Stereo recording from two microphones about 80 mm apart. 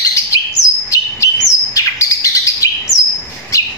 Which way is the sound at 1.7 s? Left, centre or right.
Left.